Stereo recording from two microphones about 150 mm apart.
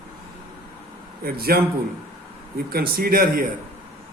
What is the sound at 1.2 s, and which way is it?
Speech, 90° right.